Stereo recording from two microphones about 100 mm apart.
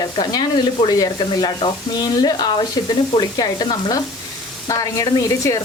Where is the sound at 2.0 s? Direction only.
40° left (ahead or behind).